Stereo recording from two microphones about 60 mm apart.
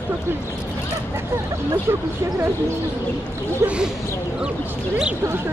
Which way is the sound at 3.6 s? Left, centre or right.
Right.